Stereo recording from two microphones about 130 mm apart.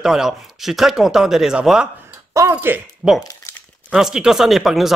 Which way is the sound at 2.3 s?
20° right (ahead or behind).